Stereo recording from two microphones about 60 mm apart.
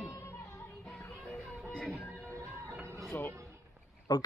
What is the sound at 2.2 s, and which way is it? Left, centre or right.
Music, right.